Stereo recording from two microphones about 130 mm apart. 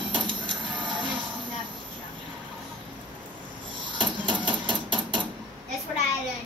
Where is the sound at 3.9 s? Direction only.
40° right (ahead or behind).